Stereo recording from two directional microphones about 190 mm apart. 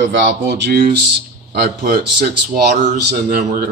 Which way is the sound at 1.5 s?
55° right (ahead or behind).